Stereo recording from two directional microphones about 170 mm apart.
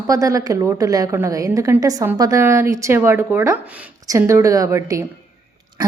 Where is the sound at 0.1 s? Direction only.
20° right (ahead or behind).